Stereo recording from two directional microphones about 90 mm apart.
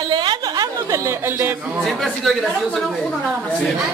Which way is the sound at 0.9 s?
30° right (ahead or behind).